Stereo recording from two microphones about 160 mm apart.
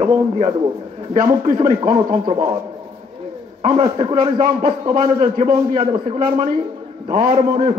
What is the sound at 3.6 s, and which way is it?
A man's voice, 35° right (ahead or behind).